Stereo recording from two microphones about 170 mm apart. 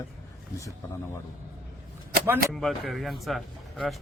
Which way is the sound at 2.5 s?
Centre (ahead or behind).